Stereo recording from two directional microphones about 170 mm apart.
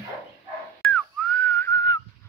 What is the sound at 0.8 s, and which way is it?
Whistling, 10° left (ahead or behind).